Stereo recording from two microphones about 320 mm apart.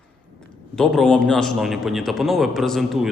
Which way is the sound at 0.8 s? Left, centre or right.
Centre.